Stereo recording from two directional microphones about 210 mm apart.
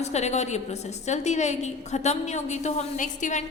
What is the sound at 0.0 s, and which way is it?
A woman's voice, 30° left (ahead or behind).